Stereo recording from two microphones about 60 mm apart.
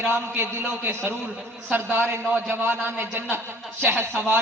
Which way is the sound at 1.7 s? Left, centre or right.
Right.